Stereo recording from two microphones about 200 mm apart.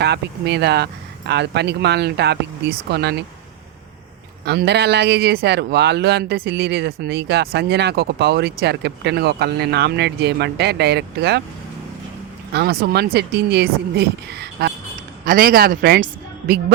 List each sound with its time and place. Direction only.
0.0 s speech: 55° right (ahead or behind)
4.4 s speech: 55° right (ahead or behind)
12.5 s a man's voice: 55° right (ahead or behind)